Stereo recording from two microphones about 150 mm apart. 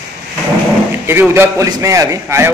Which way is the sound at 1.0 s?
15° right (ahead or behind).